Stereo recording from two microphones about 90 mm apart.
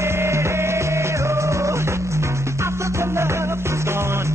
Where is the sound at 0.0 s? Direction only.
30° right (ahead or behind).